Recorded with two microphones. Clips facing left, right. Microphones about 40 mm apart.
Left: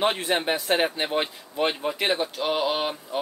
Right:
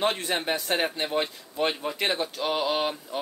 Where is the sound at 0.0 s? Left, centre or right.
Centre.